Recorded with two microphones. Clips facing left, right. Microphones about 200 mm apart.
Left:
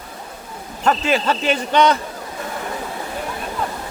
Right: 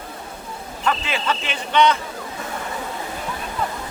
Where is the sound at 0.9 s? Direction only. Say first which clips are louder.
Left 5 dB; 40° left (ahead or behind).